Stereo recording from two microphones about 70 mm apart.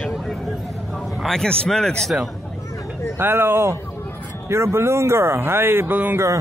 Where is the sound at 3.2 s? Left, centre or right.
Right.